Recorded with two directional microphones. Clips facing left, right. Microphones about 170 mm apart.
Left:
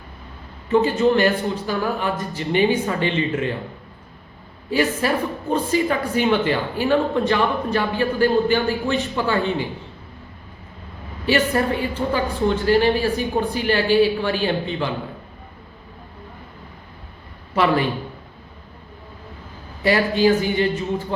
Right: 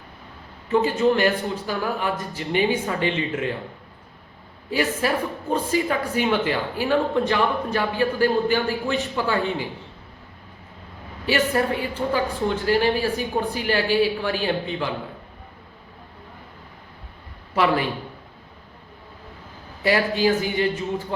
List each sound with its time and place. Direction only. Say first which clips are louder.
0.7 s speech: left 2 dB; 10° right (ahead or behind)
4.7 s speech: left 3 dB; 10° right (ahead or behind)
11.3 s speech: left 2 dB; 10° right (ahead or behind)
17.5 s a man's voice: left 2 dB; 10° right (ahead or behind)
19.8 s speech: left 3 dB; 10° right (ahead or behind)